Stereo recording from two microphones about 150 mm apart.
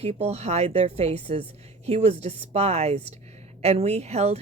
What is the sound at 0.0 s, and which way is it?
Speech, 45° right (ahead or behind).